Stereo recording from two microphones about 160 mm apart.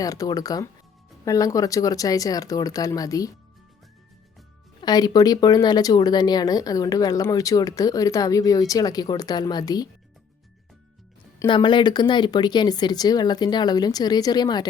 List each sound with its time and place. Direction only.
0.0 s speech: 20° left (ahead or behind)
4.8 s speech: 25° left (ahead or behind)
11.4 s speech: 30° left (ahead or behind)